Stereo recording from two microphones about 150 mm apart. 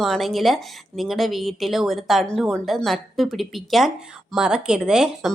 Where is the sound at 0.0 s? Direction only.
Centre (ahead or behind).